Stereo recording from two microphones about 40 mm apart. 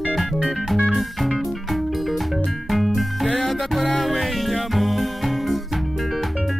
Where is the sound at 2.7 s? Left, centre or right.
Centre.